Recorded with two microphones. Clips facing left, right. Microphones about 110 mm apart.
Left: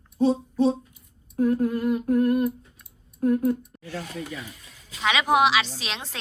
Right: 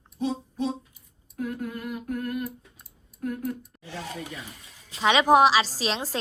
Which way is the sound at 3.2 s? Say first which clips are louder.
Left 9 dB; 30° left (ahead or behind).